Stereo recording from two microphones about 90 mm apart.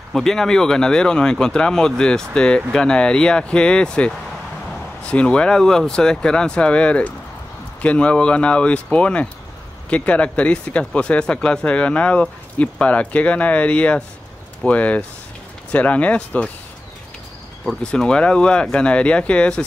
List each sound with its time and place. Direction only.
0.1 s speech: 5° left (ahead or behind)
17.6 s speech: 10° left (ahead or behind)